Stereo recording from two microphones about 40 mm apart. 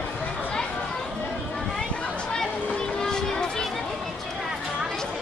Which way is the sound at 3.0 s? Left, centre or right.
Centre.